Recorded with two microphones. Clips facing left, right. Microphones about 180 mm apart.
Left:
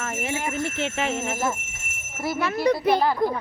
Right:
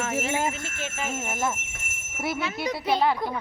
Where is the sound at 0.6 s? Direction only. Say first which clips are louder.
Left 7 dB; 65° left (ahead or behind).